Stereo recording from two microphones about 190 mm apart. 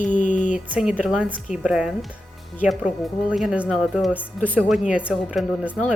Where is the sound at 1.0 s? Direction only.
5° right (ahead or behind).